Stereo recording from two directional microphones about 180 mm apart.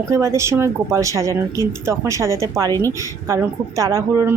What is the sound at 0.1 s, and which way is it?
Speech, 15° right (ahead or behind).